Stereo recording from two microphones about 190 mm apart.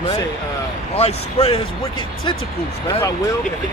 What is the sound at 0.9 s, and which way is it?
Speech, 30° left (ahead or behind).